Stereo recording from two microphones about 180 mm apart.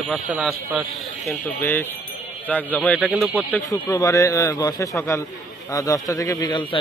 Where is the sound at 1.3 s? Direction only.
10° left (ahead or behind).